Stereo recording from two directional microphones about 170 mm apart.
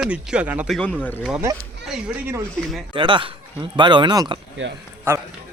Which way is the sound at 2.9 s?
30° right (ahead or behind).